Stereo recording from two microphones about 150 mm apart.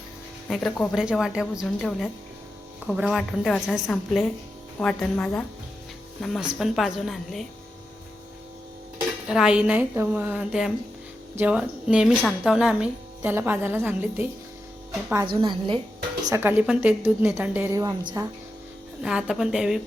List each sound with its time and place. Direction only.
0.4 s a woman's voice: centre (ahead or behind)
6.5 s speech: centre (ahead or behind)
9.3 s a woman's voice: 5° right (ahead or behind)
10.3 s a woman's voice: 5° right (ahead or behind)
15.3 s a woman's voice: 35° right (ahead or behind)
16.3 s a woman's voice: 15° right (ahead or behind)
19.0 s speech: 5° right (ahead or behind)